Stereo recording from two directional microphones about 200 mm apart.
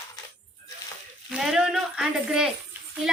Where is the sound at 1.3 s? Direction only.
Centre (ahead or behind).